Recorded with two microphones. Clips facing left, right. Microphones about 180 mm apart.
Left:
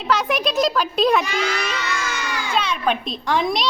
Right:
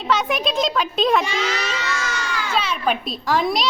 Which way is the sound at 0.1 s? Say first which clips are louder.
Even; centre (ahead or behind).